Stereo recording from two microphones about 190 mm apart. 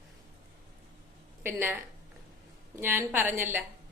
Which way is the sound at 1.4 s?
10° right (ahead or behind).